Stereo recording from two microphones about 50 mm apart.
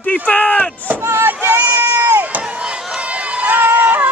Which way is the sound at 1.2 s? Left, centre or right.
Right.